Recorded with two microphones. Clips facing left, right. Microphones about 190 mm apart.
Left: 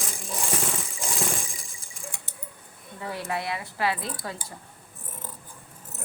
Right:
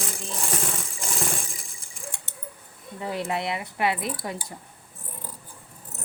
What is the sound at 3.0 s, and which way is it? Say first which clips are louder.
Speech: right 3 dB; 20° right (ahead or behind).